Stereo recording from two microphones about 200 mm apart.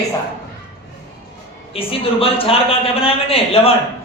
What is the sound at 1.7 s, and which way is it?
Speech, 30° left (ahead or behind).